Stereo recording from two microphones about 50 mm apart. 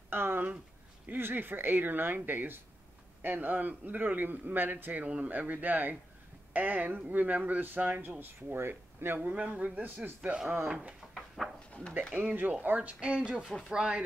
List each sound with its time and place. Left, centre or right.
0.1 s a sound: right
1.0 s speech: right
5.0 s speech: right
9.2 s speech: right
9.8 s a man's voice: right
11.4 s dog: centre
12.1 s speech: right; by 14.0 s centre